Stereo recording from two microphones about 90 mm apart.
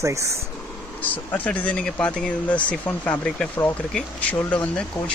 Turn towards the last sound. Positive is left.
turn(degrees=15)  # may be behind; listen again after turning